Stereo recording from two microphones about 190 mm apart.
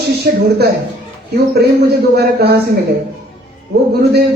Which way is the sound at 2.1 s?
55° right (ahead or behind).